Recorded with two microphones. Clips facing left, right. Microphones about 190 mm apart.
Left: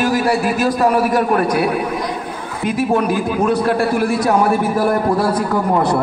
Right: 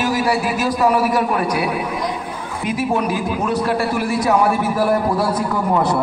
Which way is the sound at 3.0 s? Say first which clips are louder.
Left 3 dB; 50° left (ahead or behind).